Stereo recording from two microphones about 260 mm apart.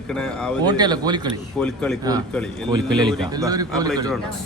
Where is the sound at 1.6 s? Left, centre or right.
Centre.